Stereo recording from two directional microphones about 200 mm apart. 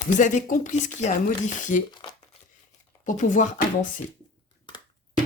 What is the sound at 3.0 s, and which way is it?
Speech, 40° left (ahead or behind).